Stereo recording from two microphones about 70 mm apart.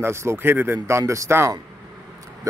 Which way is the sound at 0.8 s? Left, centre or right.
Right.